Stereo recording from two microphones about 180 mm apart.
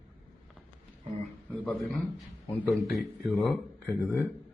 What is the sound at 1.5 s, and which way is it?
Speech, 10° left (ahead or behind).